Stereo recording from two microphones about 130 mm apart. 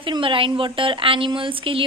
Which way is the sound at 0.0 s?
40° right (ahead or behind).